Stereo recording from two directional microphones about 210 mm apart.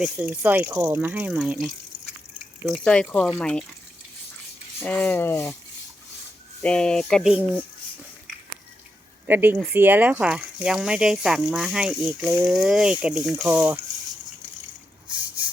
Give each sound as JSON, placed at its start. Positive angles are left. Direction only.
{"t": 0.0, "sound": "speech", "side_deg": -5}
{"t": 4.8, "sound": "speech", "side_deg": 10}
{"t": 6.6, "sound": "speech", "side_deg": 5}
{"t": 9.2, "sound": "speech", "side_deg": -10}